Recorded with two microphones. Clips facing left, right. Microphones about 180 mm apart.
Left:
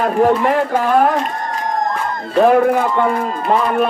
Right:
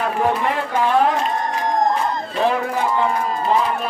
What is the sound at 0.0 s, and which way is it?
A man's voice, 45° left (ahead or behind).